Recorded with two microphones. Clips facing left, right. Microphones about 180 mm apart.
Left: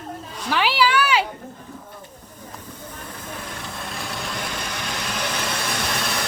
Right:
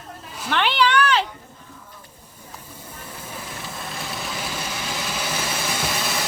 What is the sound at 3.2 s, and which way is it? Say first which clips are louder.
Vehicle: left 1 dB; centre (ahead or behind).